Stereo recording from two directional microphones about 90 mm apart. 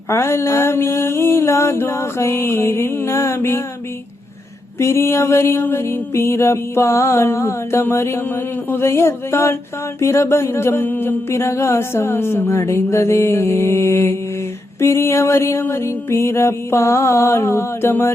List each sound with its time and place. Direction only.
0.1 s mantra: 30° left (ahead or behind)
4.8 s mantra: 30° left (ahead or behind)
10.0 s a sound: 30° left (ahead or behind)
14.8 s mantra: 30° left (ahead or behind)